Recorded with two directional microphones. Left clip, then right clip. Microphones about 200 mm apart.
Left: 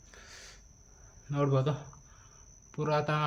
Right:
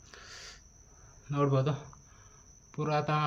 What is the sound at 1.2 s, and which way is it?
Speech, 5° right (ahead or behind).